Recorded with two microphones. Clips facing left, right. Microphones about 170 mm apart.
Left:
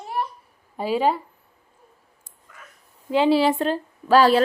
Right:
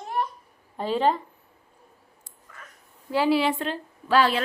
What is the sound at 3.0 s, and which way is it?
Speech, 20° left (ahead or behind).